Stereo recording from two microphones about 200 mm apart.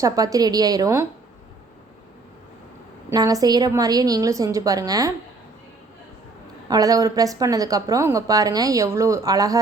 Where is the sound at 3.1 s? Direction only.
20° right (ahead or behind).